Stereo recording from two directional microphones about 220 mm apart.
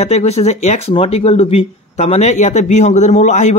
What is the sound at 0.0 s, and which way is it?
Speech, 30° left (ahead or behind).